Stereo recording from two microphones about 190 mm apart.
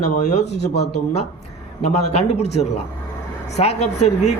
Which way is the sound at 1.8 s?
35° left (ahead or behind).